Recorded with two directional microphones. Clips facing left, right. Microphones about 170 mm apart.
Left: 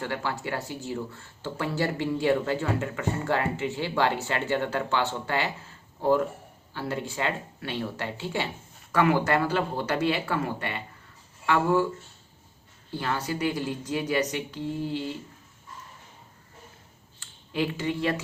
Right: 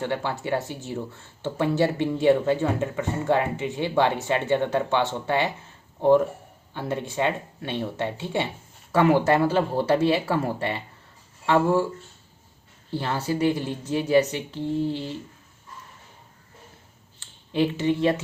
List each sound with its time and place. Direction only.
0.0 s speech: 20° right (ahead or behind)
6.7 s speech: 20° right (ahead or behind)
12.9 s speech: 30° right (ahead or behind)
17.2 s speech: 25° right (ahead or behind)